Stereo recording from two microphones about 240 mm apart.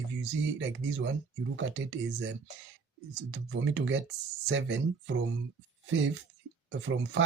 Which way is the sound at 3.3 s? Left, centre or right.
Right.